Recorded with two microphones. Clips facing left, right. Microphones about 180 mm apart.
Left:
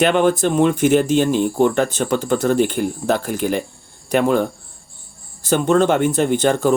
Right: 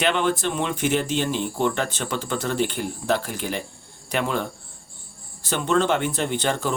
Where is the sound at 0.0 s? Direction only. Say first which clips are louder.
Left 7 dB; 45° left (ahead or behind).